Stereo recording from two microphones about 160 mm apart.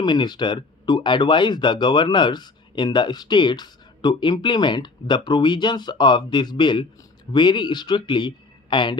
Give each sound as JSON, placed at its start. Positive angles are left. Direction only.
{"t": 0.0, "sound": "speech", "side_deg": 25}